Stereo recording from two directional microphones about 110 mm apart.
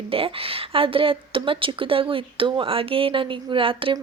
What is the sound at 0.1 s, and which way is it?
Speech, 60° right (ahead or behind).